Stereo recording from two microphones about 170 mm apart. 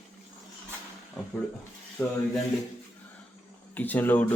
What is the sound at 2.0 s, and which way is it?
Speech, 15° left (ahead or behind).